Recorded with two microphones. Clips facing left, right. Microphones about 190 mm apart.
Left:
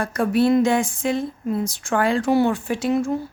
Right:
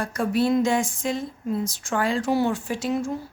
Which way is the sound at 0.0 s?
60° left (ahead or behind).